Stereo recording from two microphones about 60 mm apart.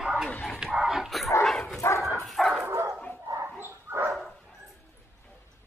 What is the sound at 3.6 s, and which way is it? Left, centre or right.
Dog, right.